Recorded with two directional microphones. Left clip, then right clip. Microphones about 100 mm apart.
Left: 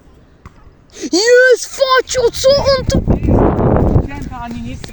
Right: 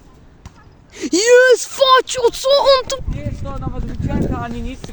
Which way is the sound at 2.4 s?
40° right (ahead or behind).